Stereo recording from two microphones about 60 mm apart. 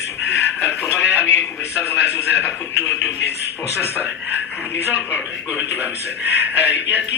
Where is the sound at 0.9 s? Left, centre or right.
Left.